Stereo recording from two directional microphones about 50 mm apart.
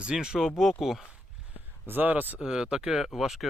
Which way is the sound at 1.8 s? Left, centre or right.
Right.